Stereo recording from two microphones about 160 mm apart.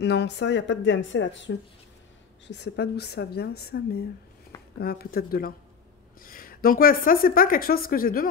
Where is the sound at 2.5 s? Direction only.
90° left.